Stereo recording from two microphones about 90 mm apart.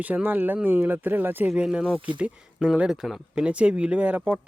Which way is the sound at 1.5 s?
10° right (ahead or behind).